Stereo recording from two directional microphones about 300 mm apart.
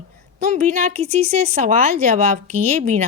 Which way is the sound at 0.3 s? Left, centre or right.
Right.